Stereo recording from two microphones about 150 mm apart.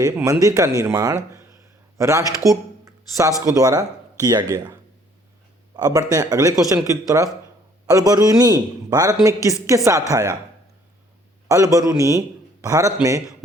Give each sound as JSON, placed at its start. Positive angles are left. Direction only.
{"t": 0.0, "sound": "speech", "side_deg": -20}
{"t": 11.4, "sound": "speech", "side_deg": -20}